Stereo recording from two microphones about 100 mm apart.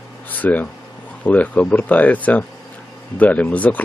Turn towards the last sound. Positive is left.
turn(degrees=15)  # may be behind; listen again after turning